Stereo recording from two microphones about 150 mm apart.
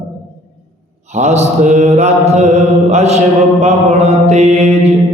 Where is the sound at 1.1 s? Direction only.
50° right (ahead or behind).